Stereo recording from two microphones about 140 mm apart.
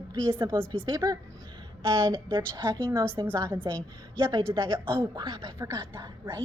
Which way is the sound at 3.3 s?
15° right (ahead or behind).